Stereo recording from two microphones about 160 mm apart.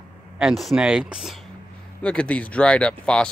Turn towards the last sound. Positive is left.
turn(degrees=5)  # may be behind; listen again after turning